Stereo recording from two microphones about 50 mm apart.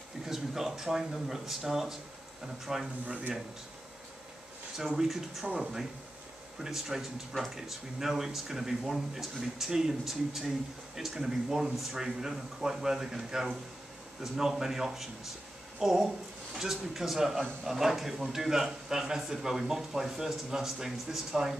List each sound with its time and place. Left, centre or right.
0.2 s speech: centre
3.1 s speech: right
4.7 s speech: centre